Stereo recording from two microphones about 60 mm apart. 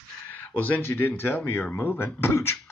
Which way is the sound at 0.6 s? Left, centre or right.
Left.